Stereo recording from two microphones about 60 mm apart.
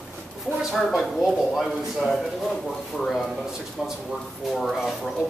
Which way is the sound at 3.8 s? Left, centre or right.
Centre.